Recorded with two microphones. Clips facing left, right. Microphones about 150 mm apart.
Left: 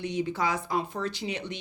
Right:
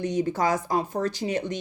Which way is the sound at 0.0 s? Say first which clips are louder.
Right 4 dB; 45° right (ahead or behind).